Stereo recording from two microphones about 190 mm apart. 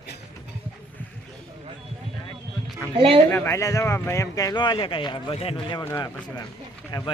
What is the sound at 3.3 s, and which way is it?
Speech, 10° left (ahead or behind).